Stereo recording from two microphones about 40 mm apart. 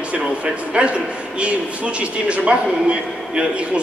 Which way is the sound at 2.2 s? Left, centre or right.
Right.